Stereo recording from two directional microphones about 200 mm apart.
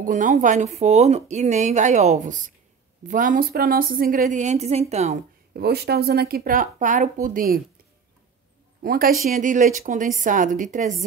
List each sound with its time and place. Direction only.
0.0 s speech: 40° right (ahead or behind)
5.5 s speech: 55° right (ahead or behind)
8.8 s speech: 45° right (ahead or behind)